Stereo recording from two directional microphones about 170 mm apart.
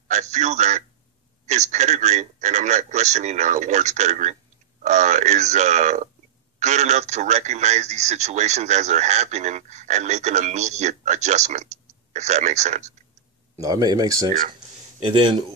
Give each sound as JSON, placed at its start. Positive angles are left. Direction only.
{"t": 0.1, "sound": "speech", "side_deg": -40}
{"t": 13.6, "sound": "a man's voice", "side_deg": -20}
{"t": 15.0, "sound": "a man's voice", "side_deg": -30}